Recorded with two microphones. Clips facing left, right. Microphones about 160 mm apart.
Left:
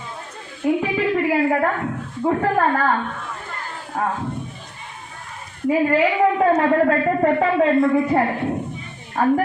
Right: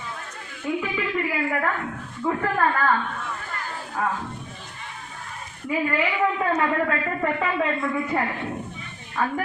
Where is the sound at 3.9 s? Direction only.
40° left (ahead or behind).